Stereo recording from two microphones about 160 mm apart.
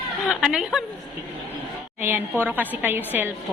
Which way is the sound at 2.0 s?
10° right (ahead or behind).